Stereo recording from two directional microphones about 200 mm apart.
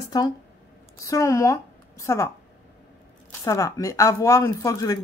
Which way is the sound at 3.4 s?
15° left (ahead or behind).